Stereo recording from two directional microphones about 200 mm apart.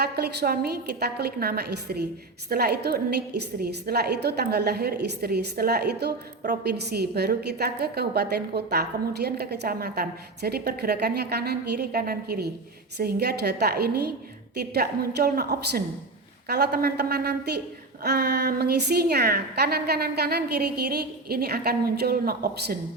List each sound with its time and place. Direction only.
0.0 s a woman's voice: 55° right (ahead or behind)